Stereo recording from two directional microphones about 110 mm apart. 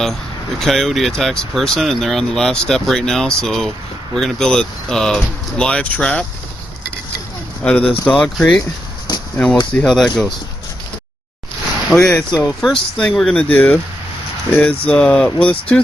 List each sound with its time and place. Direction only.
0.6 s speech: centre (ahead or behind)
7.6 s speech: 10° left (ahead or behind)
9.1 s a sound: 40° left (ahead or behind)
9.7 s speech: 5° left (ahead or behind)
11.9 s speech: centre (ahead or behind)